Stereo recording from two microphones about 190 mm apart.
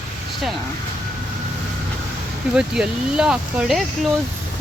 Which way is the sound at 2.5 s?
5° right (ahead or behind).